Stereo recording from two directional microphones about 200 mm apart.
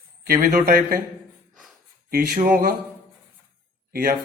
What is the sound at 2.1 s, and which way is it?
Speech, 45° right (ahead or behind).